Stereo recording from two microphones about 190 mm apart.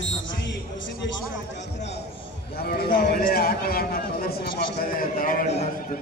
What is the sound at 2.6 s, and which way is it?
A man's voice, 55° left (ahead or behind).